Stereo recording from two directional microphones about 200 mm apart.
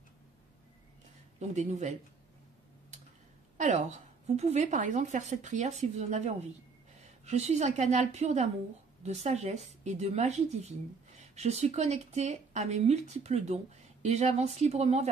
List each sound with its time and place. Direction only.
1.4 s speech: 35° right (ahead or behind)
3.5 s a woman's voice: 35° right (ahead or behind)